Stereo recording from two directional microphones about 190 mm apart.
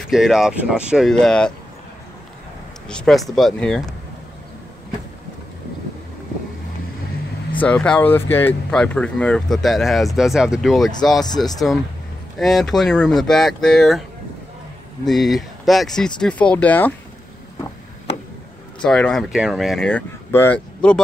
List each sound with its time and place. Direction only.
0.0 s speech: centre (ahead or behind)
2.9 s speech: centre (ahead or behind)
7.5 s speech: 5° left (ahead or behind)
11.2 s speech: 20° left (ahead or behind)
12.4 s speech: centre (ahead or behind)
15.0 s speech: centre (ahead or behind)
18.8 s speech: 5° left (ahead or behind)